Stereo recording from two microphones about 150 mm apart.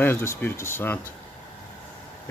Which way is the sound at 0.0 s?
15° left (ahead or behind).